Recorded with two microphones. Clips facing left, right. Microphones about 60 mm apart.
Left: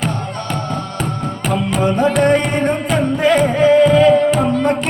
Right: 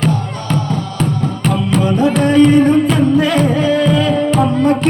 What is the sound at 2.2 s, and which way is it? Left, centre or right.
Music, left.